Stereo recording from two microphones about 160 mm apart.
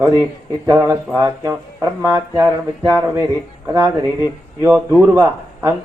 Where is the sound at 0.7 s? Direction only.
20° right (ahead or behind).